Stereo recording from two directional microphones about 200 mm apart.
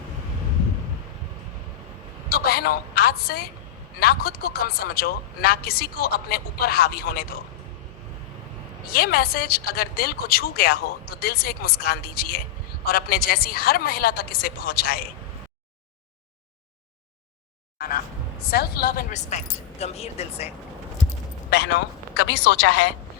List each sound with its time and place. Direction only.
2.3 s a woman's voice: 50° left (ahead or behind)
8.9 s a woman's voice: 50° left (ahead or behind)
17.7 s speech: 45° left (ahead or behind); by 20.5 s 30° left (ahead or behind)
21.5 s speech: 60° left (ahead or behind)